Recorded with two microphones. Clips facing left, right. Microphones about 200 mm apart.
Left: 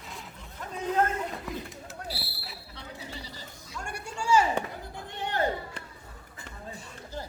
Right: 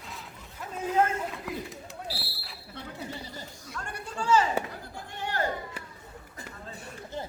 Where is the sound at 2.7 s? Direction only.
50° right (ahead or behind).